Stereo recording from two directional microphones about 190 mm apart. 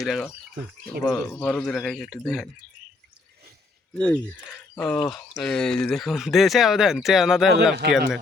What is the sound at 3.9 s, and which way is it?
Speech, 5° left (ahead or behind).